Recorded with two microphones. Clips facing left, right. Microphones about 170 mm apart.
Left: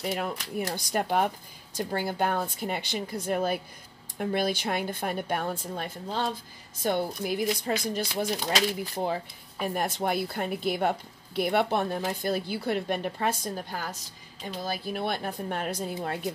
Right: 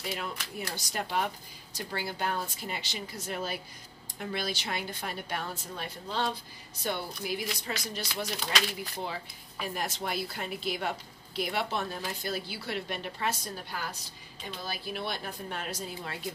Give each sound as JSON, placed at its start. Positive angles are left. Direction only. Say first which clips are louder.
{"t": 0.0, "sound": "a woman's voice", "louder": "left 6 dB", "side_deg": 50}